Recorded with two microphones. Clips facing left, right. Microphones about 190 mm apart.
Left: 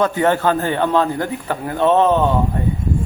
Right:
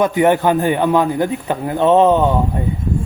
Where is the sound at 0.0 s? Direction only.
15° right (ahead or behind).